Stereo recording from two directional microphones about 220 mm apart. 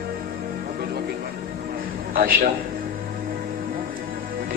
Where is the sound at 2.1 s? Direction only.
40° right (ahead or behind).